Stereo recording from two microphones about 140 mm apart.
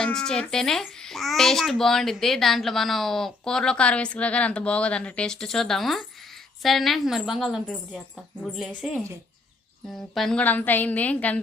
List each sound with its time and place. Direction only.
0.0 s a child's voice: 5° left (ahead or behind)
10.2 s a woman's voice: 5° left (ahead or behind)